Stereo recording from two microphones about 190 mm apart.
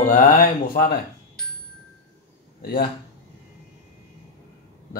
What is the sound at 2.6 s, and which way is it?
Speech, 50° left (ahead or behind).